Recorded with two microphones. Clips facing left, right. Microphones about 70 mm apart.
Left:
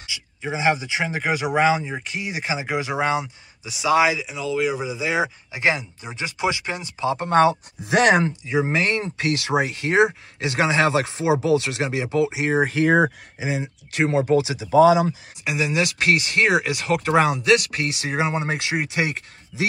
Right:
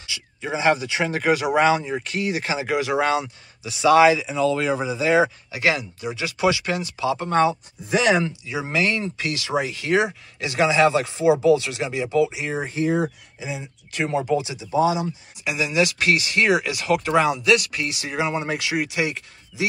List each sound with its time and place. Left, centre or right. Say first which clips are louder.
0.0 s speech: even; centre
5.5 s speech: even; left
7.2 s speech: left 4 dB; left
8.2 s speech: left 4 dB; left
14.1 s speech: left 3 dB; left
14.6 s speech: left 8 dB; left